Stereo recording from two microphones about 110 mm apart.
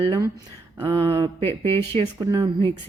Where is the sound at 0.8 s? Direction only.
30° right (ahead or behind).